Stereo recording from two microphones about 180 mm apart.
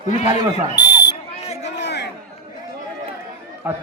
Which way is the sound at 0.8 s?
70° left (ahead or behind).